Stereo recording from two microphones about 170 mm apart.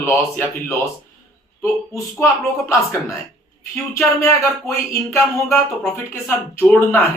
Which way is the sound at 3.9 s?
15° left (ahead or behind).